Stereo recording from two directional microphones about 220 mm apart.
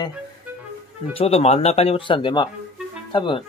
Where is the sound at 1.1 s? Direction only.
25° left (ahead or behind).